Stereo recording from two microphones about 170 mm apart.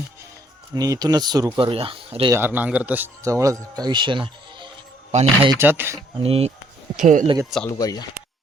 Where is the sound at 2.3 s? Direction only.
10° right (ahead or behind); by 4.7 s 30° right (ahead or behind).